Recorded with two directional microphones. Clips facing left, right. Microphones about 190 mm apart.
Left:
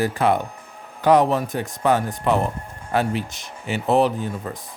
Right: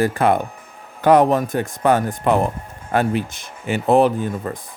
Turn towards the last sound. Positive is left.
turn(degrees=-50)  # may be behind; listen again after turning